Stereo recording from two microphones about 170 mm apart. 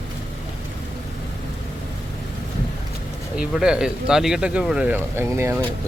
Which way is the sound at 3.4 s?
5° right (ahead or behind).